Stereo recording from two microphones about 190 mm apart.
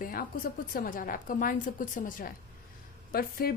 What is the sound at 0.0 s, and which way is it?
A woman's voice, 50° left (ahead or behind).